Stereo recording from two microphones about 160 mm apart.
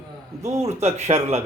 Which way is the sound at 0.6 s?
40° right (ahead or behind).